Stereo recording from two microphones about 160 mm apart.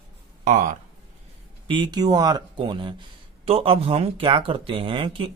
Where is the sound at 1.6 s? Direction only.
30° right (ahead or behind).